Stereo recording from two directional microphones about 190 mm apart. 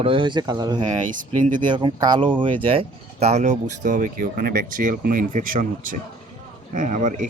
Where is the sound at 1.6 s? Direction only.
25° right (ahead or behind).